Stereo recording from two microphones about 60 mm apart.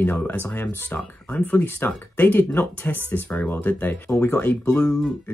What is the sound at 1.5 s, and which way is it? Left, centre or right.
Speech, left.